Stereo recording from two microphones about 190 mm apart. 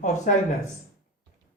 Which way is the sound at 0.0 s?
40° left (ahead or behind).